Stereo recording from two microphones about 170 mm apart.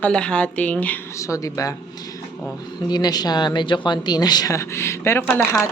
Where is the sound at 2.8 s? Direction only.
25° left (ahead or behind); by 5.6 s 5° left (ahead or behind).